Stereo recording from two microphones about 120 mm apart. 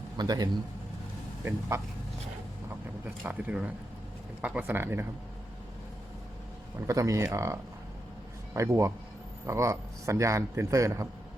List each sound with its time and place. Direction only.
0.2 s a man's voice: 35° right (ahead or behind)
3.2 s speech: 10° right (ahead or behind)
6.8 s a man's voice: 25° right (ahead or behind)